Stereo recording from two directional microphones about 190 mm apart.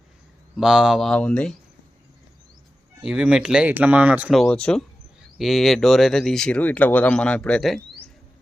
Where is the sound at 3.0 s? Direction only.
5° right (ahead or behind).